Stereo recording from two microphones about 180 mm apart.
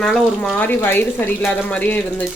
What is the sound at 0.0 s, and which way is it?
Speech, 5° left (ahead or behind).